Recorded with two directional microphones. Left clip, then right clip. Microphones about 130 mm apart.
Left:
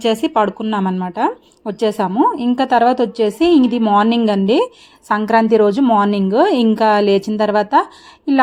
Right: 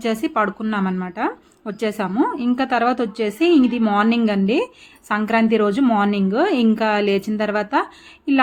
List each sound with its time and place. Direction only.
0.0 s a woman's voice: 40° left (ahead or behind); by 6.1 s 20° left (ahead or behind)
6.1 s a woman's voice: 35° left (ahead or behind)